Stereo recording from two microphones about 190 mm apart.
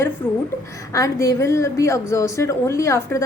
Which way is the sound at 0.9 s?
15° left (ahead or behind).